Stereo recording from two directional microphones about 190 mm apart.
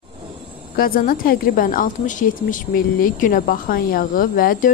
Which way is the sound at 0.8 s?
50° left (ahead or behind).